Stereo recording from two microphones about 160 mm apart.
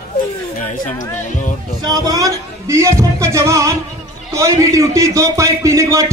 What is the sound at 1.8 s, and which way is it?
Speech, 25° right (ahead or behind).